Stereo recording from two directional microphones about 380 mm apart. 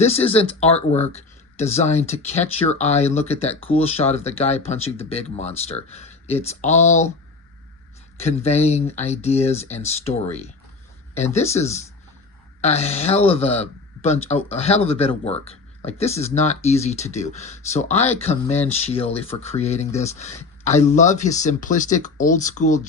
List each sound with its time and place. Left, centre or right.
0.0 s speech: centre
8.2 s speech: centre